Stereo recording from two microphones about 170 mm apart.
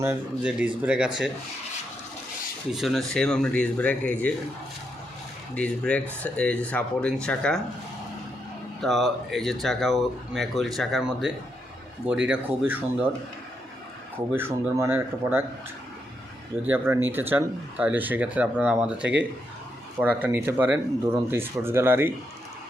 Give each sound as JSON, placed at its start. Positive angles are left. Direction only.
{"t": 0.0, "sound": "speech", "side_deg": -10}
{"t": 2.7, "sound": "speech", "side_deg": 0}
{"t": 5.5, "sound": "speech", "side_deg": 5}
{"t": 8.8, "sound": "speech", "side_deg": 0}
{"t": 14.3, "sound": "speech", "side_deg": -15}
{"t": 16.6, "sound": "speech", "side_deg": -10}